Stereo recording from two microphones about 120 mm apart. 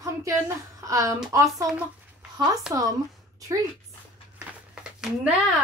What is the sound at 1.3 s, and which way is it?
A woman's voice, 25° right (ahead or behind).